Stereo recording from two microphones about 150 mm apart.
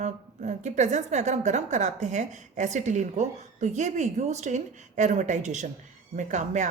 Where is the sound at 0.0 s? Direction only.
50° right (ahead or behind).